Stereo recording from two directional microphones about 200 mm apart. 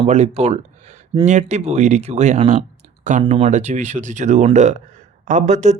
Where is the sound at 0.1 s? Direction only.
35° right (ahead or behind).